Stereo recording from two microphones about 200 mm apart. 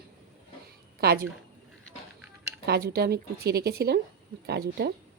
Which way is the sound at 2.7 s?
55° right (ahead or behind).